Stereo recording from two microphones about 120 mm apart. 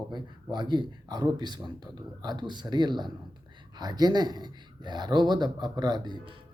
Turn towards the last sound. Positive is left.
turn(degrees=-35)  # may be behind; listen again after turning